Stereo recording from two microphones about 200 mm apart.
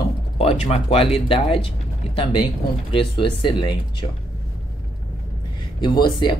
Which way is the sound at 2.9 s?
25° left (ahead or behind).